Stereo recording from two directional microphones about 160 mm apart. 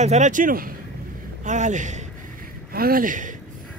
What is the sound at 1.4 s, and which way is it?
Speech, 50° right (ahead or behind).